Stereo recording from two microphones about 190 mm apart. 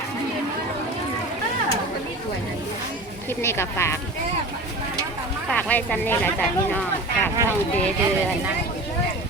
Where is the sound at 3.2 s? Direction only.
10° left (ahead or behind).